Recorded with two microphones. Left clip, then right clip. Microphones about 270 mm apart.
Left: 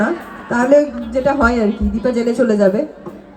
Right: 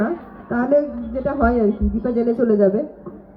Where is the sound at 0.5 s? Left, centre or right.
Left.